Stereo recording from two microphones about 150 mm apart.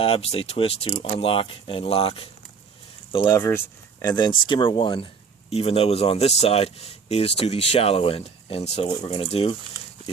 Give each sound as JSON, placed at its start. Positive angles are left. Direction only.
{"t": 0.0, "sound": "speech", "side_deg": 40}
{"t": 3.2, "sound": "speech", "side_deg": 20}